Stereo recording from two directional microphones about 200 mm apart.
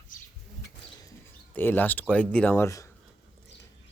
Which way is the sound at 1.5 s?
10° left (ahead or behind).